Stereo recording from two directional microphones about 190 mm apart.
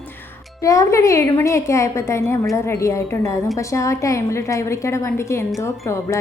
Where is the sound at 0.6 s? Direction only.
15° left (ahead or behind).